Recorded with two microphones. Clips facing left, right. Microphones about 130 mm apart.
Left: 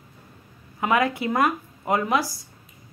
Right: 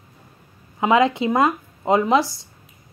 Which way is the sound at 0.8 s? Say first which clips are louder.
Right 5 dB; 20° right (ahead or behind).